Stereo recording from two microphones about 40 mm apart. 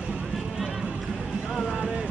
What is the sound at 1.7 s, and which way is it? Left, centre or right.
Vehicle, centre.